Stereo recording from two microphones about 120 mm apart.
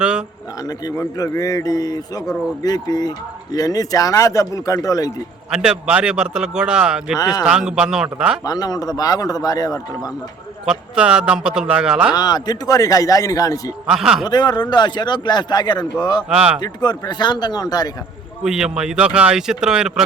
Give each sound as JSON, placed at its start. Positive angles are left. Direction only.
{"t": 0.0, "sound": "a man's voice", "side_deg": -10}
{"t": 0.9, "sound": "speech", "side_deg": 25}
{"t": 5.5, "sound": "a man's voice", "side_deg": -5}
{"t": 8.4, "sound": "speech", "side_deg": 30}
{"t": 10.7, "sound": "a man's voice", "side_deg": -10}
{"t": 12.1, "sound": "speech", "side_deg": 35}
{"t": 13.8, "sound": "speech", "side_deg": -5}
{"t": 14.3, "sound": "speech", "side_deg": 35}
{"t": 16.3, "sound": "a man's voice", "side_deg": -10}
{"t": 16.6, "sound": "speech", "side_deg": 35}
{"t": 18.4, "sound": "speech", "side_deg": -5}